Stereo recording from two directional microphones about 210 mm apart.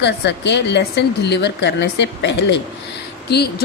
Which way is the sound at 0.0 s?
55° left (ahead or behind).